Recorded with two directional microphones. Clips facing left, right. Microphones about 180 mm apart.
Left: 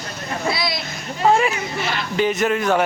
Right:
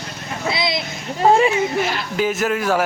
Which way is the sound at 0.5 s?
20° right (ahead or behind).